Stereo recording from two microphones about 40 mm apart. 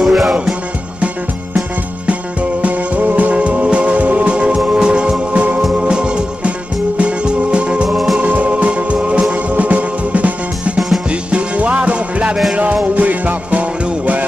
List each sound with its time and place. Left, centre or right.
0.0 s music: centre
2.6 s music: right
5.3 s music: right
7.9 s music: centre
8.2 s music: right
12.9 s music: right